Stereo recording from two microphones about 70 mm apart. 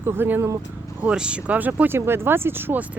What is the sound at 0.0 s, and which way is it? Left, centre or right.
Speech, right.